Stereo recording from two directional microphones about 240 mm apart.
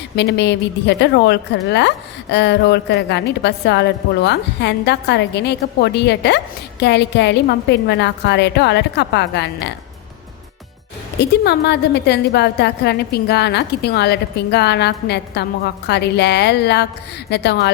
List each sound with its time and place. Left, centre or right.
0.2 s a woman's voice: left
11.2 s a woman's voice: left